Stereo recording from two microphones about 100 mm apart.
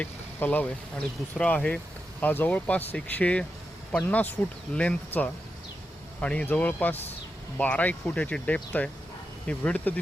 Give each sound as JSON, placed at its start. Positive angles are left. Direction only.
{"t": 0.0, "sound": "speech", "side_deg": 20}